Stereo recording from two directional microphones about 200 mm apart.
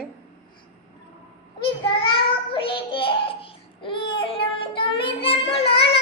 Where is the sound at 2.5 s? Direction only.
25° left (ahead or behind).